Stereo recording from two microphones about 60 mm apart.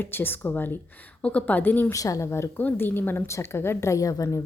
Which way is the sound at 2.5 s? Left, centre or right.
Left.